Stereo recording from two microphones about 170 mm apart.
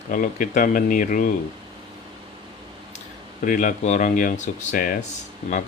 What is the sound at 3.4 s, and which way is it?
Speech, 50° left (ahead or behind).